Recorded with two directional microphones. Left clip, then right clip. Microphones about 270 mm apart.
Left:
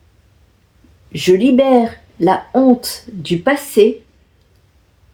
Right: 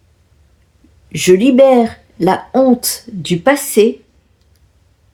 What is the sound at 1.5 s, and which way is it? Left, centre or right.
A woman's voice, right.